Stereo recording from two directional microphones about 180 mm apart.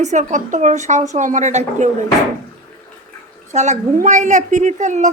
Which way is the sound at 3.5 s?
40° right (ahead or behind).